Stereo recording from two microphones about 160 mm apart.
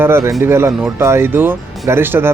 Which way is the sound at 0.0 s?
15° right (ahead or behind).